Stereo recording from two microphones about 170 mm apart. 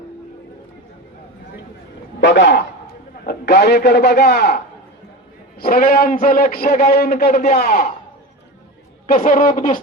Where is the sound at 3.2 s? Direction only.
70° left (ahead or behind).